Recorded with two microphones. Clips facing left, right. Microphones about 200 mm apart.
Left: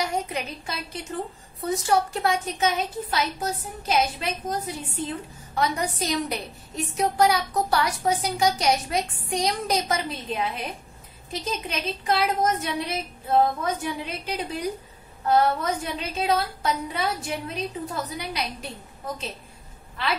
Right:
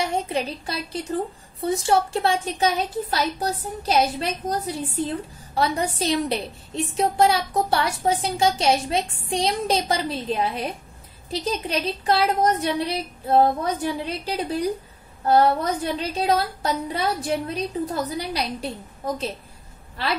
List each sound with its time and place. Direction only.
0.0 s a woman's voice: 30° right (ahead or behind)